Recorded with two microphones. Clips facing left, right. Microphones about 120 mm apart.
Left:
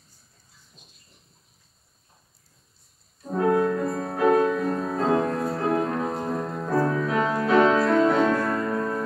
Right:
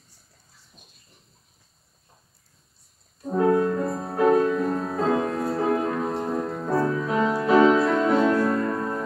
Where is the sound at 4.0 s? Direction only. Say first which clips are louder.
Right 1 dB; 10° right (ahead or behind).